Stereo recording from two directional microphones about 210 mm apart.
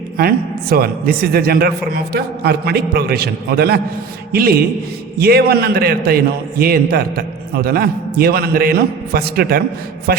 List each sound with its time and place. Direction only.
0.2 s a man's voice: 45° right (ahead or behind)